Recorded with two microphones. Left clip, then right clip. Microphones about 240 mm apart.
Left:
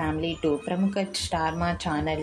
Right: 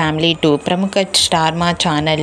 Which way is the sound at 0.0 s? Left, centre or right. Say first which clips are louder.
Right 12 dB; right.